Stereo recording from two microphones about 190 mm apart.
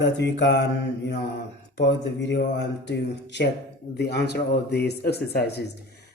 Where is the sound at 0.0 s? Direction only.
65° left (ahead or behind).